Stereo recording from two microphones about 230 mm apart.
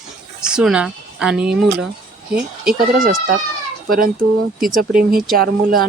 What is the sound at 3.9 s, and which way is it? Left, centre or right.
Speech, right.